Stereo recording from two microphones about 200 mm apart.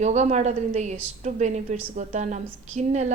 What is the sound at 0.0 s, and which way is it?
A woman's voice, 35° right (ahead or behind).